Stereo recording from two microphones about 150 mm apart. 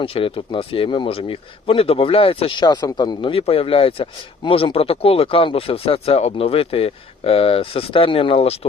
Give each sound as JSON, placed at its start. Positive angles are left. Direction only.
{"t": 0.0, "sound": "speech", "side_deg": 35}